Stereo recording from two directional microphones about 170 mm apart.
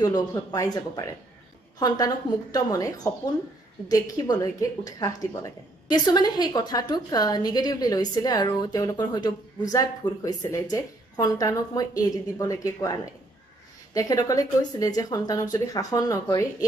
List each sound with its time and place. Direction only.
0.0 s a woman's voice: 20° left (ahead or behind)
13.9 s a woman's voice: 20° left (ahead or behind)